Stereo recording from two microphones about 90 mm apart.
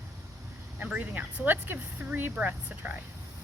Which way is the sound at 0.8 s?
20° right (ahead or behind).